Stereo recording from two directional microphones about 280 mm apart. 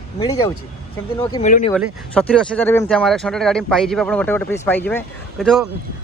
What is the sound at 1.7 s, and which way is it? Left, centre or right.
Speech, centre.